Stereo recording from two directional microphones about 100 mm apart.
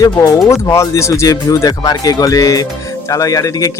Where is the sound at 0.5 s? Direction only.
30° left (ahead or behind).